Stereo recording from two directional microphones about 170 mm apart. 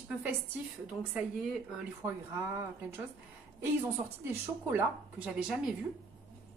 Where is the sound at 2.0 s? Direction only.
15° right (ahead or behind).